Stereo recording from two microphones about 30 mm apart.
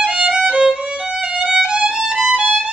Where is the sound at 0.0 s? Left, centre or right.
Right.